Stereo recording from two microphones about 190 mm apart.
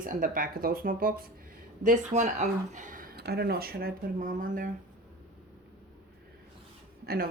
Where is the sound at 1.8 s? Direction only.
40° right (ahead or behind).